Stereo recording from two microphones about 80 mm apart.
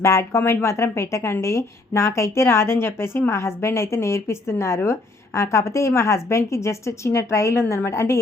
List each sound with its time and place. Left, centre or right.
0.0 s a woman's voice: left